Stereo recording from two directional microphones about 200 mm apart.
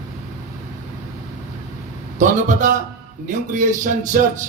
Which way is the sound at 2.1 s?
40° right (ahead or behind).